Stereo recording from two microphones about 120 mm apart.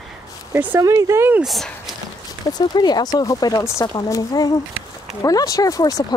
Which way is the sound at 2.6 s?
35° left (ahead or behind).